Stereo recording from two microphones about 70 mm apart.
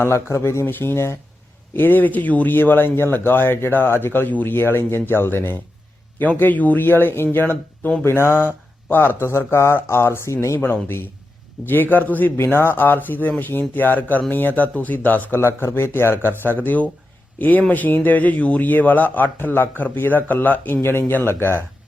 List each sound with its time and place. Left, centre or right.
0.0 s speech: left
8.0 s speech: left
10.6 s speech: left